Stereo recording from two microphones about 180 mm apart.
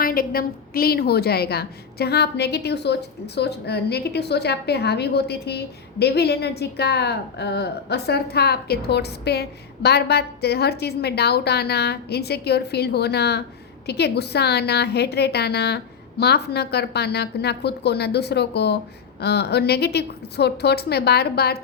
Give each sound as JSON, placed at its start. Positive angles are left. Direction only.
{"t": 0.0, "sound": "a woman's voice", "side_deg": 55}